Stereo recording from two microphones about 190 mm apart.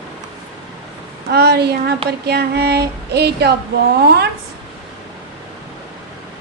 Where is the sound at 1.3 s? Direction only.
60° right (ahead or behind).